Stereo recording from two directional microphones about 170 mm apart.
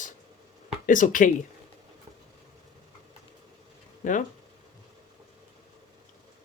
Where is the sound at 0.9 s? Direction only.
50° left (ahead or behind).